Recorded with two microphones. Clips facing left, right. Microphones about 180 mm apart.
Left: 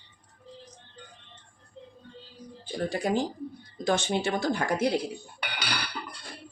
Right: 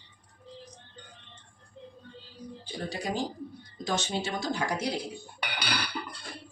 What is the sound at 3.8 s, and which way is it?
Speech, 55° left (ahead or behind).